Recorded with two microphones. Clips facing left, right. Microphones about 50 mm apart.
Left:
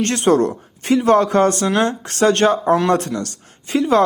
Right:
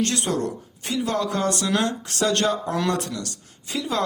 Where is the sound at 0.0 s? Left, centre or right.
Left.